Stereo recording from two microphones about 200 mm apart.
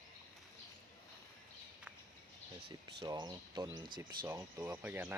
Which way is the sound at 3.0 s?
20° right (ahead or behind).